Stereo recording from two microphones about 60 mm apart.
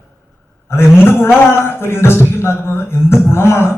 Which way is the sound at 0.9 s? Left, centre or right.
Left.